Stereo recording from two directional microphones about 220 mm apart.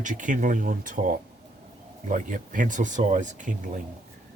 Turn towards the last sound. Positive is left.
turn(degrees=-35)  # may be behind; listen again after turning